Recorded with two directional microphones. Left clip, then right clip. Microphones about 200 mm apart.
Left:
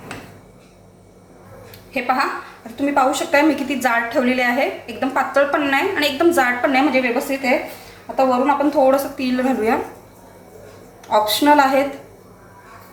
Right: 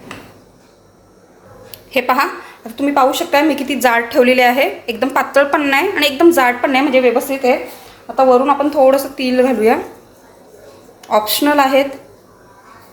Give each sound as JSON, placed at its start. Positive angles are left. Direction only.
{"t": 1.9, "sound": "a woman's voice", "side_deg": -50}
{"t": 8.1, "sound": "a woman's voice", "side_deg": -35}
{"t": 11.1, "sound": "a woman's voice", "side_deg": -40}